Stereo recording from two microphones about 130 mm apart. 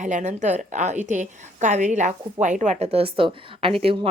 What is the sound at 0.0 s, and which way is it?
A woman's voice, 70° right (ahead or behind).